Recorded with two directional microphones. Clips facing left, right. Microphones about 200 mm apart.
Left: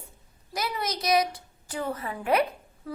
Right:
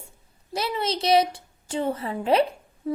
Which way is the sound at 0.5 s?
25° right (ahead or behind).